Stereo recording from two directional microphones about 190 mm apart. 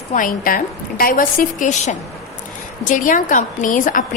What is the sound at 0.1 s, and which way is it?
A woman's voice, 45° left (ahead or behind).